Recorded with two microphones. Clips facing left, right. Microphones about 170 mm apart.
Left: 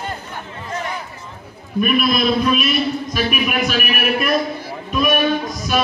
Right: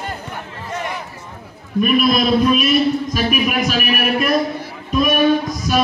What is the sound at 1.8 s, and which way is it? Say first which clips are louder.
A man's voice: right 2 dB; 40° right (ahead or behind).